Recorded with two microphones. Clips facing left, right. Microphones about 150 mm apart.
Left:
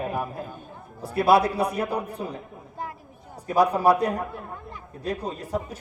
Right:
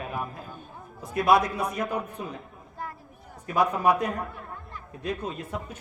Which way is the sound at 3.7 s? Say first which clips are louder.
Left 4 dB; 35° left (ahead or behind).